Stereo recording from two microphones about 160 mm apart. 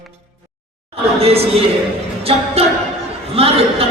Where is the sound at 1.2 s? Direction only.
40° right (ahead or behind).